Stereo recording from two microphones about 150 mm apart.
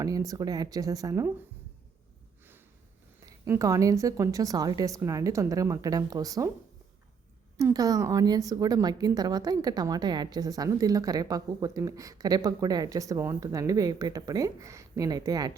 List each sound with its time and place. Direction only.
0.0 s a woman's voice: 25° right (ahead or behind)
3.2 s a woman's voice: 20° right (ahead or behind)
7.5 s a woman's voice: 25° right (ahead or behind)